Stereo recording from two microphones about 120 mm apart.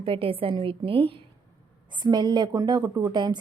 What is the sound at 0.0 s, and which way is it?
A woman's voice, 50° right (ahead or behind).